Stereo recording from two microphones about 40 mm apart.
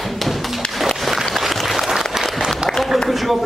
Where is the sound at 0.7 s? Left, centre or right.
Centre.